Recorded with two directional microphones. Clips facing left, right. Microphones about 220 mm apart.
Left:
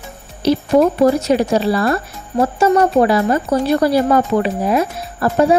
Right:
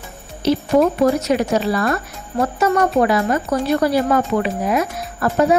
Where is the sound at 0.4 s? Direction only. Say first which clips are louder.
Left 2 dB; 35° left (ahead or behind).